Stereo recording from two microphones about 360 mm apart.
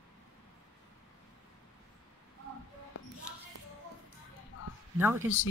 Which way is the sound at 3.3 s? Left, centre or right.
Centre.